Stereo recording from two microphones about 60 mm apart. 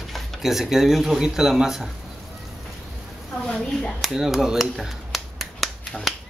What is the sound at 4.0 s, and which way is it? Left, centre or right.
Speech, centre.